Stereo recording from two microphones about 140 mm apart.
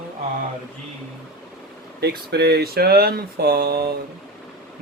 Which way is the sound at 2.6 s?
90° right.